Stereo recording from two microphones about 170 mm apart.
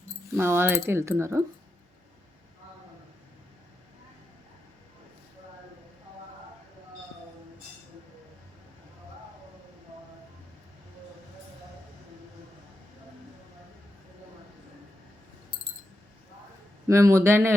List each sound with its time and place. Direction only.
0.3 s speech: 15° right (ahead or behind)
16.8 s speech: 15° right (ahead or behind)